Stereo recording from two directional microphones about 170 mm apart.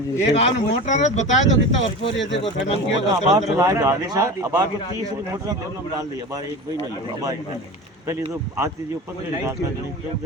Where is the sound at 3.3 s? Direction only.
20° right (ahead or behind).